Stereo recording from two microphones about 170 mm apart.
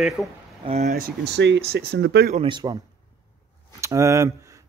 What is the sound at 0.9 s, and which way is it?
Speech, 65° right (ahead or behind).